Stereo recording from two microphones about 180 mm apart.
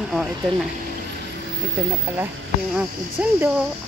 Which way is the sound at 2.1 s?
10° right (ahead or behind).